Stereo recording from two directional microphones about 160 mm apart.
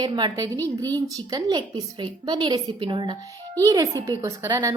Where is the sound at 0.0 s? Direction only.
25° right (ahead or behind).